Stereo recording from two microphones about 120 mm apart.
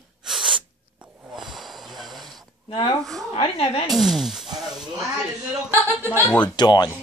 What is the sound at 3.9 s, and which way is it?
Speech, centre (ahead or behind).